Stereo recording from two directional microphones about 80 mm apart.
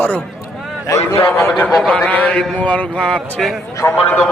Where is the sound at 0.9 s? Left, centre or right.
Left.